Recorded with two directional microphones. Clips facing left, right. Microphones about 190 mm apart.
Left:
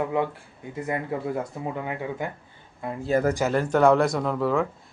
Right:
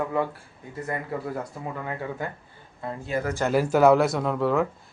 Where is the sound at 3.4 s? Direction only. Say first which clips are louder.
Right 3 dB; 5° right (ahead or behind).